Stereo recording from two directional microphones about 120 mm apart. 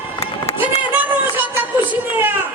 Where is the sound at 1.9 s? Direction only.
15° right (ahead or behind).